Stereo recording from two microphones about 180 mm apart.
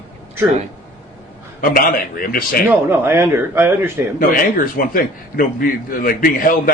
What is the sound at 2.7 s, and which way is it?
A man's voice, 10° right (ahead or behind).